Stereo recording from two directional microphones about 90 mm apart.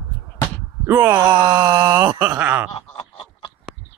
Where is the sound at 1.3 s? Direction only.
55° right (ahead or behind).